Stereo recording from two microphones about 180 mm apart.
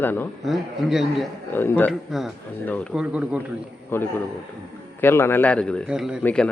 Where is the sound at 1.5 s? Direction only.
10° left (ahead or behind).